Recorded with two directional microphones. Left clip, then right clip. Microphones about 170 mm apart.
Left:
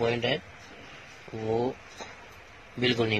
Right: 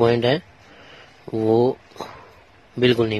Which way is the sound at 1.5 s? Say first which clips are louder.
Right 10 dB; 60° right (ahead or behind).